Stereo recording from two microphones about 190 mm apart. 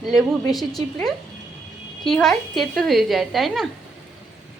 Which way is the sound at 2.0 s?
5° left (ahead or behind).